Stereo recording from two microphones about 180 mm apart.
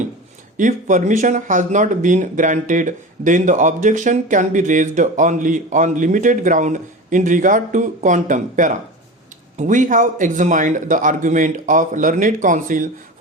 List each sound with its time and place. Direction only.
0.5 s speech: 45° right (ahead or behind)